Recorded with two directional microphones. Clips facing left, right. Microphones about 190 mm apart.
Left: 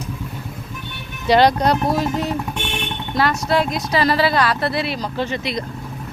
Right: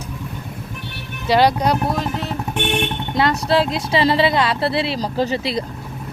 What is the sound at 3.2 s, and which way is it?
A woman's voice, 25° right (ahead or behind).